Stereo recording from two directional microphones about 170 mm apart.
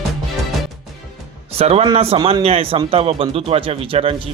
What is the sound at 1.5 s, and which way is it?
A man's voice, 35° right (ahead or behind).